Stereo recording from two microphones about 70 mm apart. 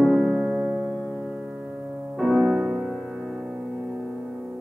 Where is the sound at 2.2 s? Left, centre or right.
Centre.